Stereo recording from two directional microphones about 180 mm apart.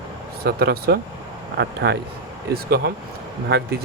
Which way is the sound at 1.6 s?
70° right (ahead or behind).